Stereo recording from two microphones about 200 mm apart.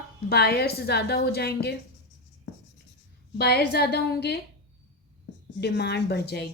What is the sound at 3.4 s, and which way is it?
A woman's voice, 55° left (ahead or behind).